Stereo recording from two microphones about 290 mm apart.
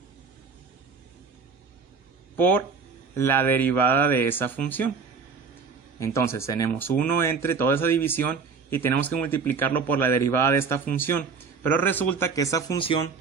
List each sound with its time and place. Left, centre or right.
2.3 s a man's voice: centre
6.1 s a man's voice: centre